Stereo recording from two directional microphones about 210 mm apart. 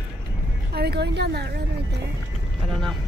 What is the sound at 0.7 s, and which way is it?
Speech, 50° right (ahead or behind).